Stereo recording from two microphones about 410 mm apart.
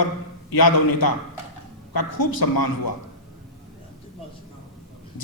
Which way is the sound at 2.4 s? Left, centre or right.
Left.